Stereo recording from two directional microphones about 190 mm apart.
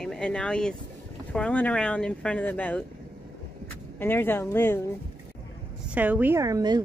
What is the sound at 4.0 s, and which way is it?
Speech, 10° left (ahead or behind).